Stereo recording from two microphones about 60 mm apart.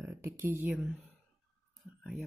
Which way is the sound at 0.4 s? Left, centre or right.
Right.